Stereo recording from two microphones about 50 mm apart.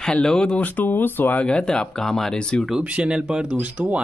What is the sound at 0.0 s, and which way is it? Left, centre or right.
Speech, centre.